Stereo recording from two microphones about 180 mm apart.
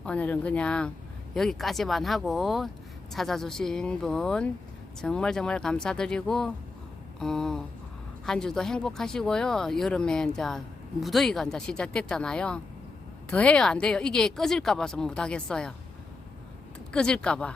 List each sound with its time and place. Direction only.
0.0 s speech: 5° left (ahead or behind)
16.9 s speech: 5° left (ahead or behind)